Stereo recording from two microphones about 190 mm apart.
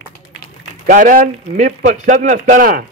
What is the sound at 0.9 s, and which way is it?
A man's voice, 45° right (ahead or behind).